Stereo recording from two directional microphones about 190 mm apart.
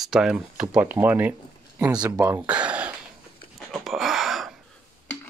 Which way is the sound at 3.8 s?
Centre (ahead or behind).